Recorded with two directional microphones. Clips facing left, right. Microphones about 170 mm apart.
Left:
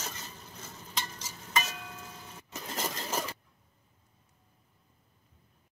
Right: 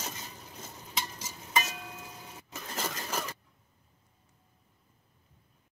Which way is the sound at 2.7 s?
25° left (ahead or behind).